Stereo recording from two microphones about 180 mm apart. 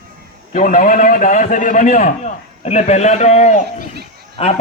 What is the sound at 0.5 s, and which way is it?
A man's voice, 50° left (ahead or behind).